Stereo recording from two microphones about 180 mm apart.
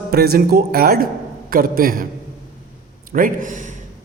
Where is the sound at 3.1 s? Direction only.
50° right (ahead or behind).